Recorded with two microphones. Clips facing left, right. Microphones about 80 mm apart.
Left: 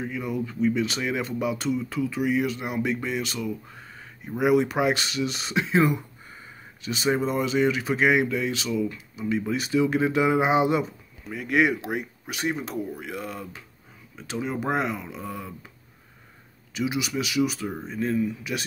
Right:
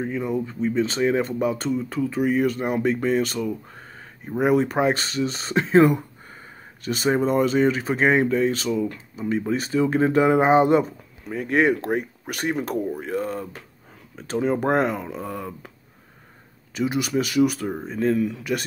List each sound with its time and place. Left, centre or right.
0.0 s speech: right
16.7 s speech: right
18.1 s speech: right